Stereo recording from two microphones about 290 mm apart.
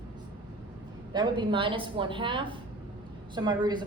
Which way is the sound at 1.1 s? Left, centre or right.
Centre.